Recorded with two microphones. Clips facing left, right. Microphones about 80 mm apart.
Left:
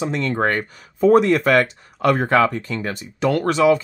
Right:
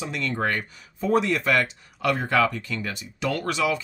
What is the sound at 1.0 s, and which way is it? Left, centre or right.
Speech, left.